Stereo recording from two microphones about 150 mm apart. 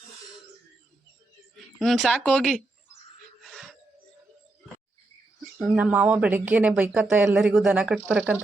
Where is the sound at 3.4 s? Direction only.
Centre (ahead or behind).